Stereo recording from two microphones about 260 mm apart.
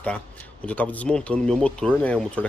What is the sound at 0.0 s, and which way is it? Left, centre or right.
Speech, centre.